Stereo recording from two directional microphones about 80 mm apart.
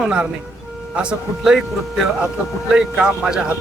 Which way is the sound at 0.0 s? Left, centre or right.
Centre.